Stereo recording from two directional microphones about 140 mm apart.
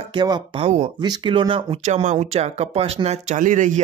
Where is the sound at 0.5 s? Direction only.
50° right (ahead or behind).